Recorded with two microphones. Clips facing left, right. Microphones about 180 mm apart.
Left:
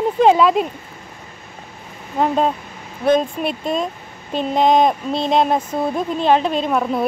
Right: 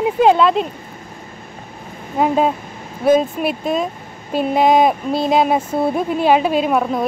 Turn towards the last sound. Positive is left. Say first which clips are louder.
# right 2 dB
turn(degrees=0)  # may be behind; listen again after turning